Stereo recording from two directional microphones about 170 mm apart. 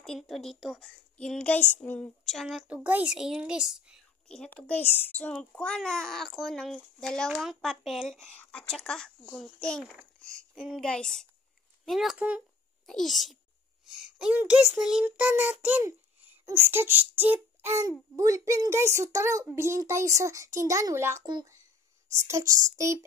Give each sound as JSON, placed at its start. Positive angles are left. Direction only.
{"t": 0.0, "sound": "a woman's voice", "side_deg": 0}